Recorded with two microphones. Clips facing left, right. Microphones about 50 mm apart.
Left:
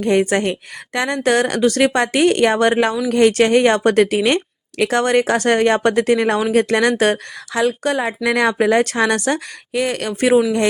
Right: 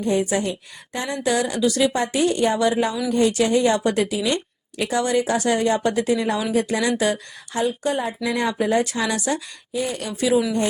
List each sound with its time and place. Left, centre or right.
0.0 s a woman's voice: left
0.9 s a woman's voice: left
7.5 s a woman's voice: left